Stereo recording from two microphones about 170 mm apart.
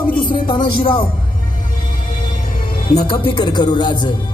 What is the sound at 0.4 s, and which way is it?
Speech, 25° left (ahead or behind).